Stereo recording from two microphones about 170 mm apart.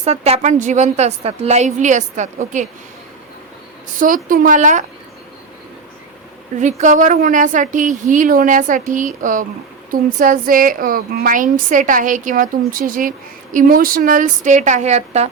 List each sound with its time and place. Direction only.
0.0 s a woman's voice: 40° right (ahead or behind)
3.9 s a woman's voice: 50° right (ahead or behind)
6.6 s a woman's voice: 45° right (ahead or behind)